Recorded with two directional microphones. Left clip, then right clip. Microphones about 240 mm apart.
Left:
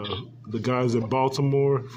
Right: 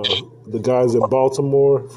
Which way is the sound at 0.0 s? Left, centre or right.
Right.